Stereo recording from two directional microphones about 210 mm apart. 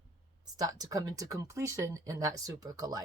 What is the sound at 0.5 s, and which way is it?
Speech, 15° right (ahead or behind).